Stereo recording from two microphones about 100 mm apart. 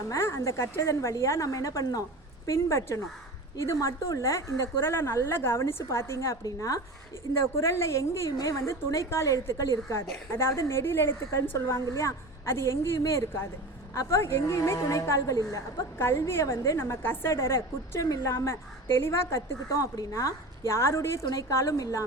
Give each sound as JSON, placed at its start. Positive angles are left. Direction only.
{"t": 0.1, "sound": "a woman's voice", "side_deg": 30}